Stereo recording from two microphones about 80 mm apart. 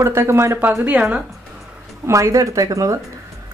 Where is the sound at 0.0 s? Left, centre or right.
Right.